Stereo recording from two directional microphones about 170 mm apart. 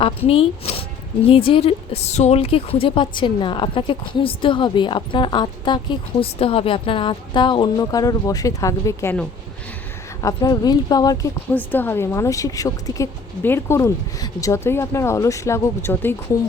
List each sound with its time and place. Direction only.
0.0 s a woman's voice: 35° left (ahead or behind); by 9.2 s 15° left (ahead or behind)
10.2 s a woman's voice: 20° left (ahead or behind)